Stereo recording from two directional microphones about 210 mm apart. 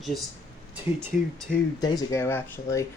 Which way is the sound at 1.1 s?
40° left (ahead or behind).